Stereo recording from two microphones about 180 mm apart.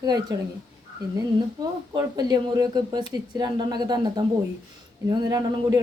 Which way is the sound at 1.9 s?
20° right (ahead or behind).